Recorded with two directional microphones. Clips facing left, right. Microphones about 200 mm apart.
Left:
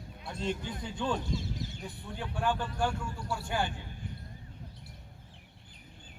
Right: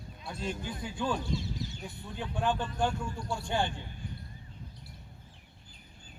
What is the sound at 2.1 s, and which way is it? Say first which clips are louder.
A man's voice: right 1 dB; 20° right (ahead or behind).